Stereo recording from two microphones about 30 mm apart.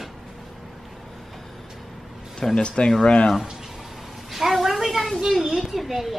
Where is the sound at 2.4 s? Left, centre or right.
Centre.